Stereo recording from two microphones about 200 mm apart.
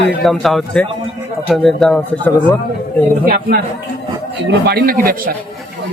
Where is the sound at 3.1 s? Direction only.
45° right (ahead or behind).